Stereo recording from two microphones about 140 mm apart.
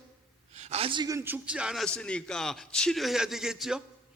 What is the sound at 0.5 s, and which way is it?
Speech, 50° right (ahead or behind).